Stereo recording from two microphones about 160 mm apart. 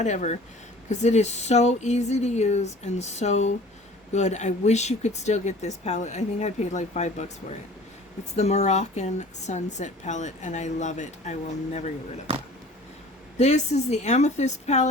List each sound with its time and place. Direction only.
0.0 s a woman's voice: 45° left (ahead or behind)
8.4 s a woman's voice: 45° left (ahead or behind)
13.4 s a woman's voice: 45° left (ahead or behind)